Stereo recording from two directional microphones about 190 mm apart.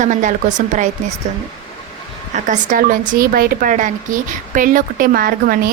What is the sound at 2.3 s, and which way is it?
A woman's voice, 40° right (ahead or behind).